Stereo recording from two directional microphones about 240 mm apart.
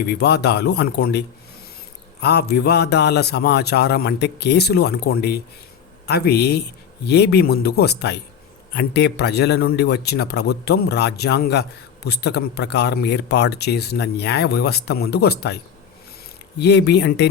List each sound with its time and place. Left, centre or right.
0.1 s speech: left
2.2 s speech: left